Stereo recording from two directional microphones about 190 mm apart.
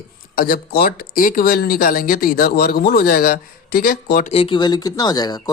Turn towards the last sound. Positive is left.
turn(degrees=20)  # may be behind; listen again after turning